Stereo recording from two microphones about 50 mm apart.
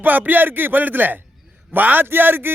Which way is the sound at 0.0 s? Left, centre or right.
Right.